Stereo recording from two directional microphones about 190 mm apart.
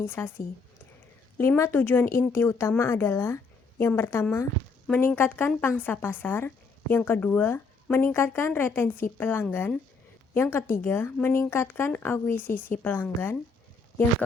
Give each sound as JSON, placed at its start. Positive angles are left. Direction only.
{"t": 0.0, "sound": "a woman's voice", "side_deg": 10}
{"t": 1.4, "sound": "a woman's voice", "side_deg": 15}